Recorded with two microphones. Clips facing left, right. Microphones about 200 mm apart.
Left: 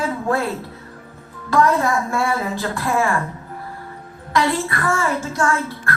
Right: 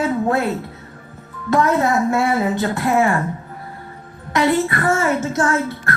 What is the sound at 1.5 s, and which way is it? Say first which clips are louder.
A woman's voice: right 1 dB; 20° right (ahead or behind).